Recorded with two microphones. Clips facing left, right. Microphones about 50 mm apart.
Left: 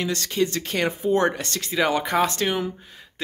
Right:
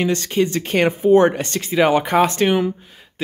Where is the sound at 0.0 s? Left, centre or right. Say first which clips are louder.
Right 5 dB; right.